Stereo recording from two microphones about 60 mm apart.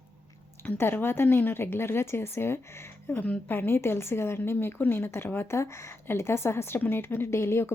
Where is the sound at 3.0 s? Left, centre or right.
Left.